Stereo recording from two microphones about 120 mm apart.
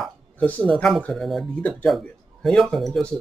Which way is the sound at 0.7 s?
5° left (ahead or behind).